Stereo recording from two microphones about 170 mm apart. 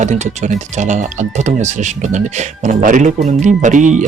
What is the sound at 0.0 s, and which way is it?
Speech, 45° right (ahead or behind).